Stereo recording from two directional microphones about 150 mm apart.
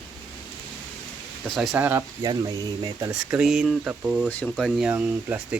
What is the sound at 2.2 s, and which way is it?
Speech, 25° right (ahead or behind).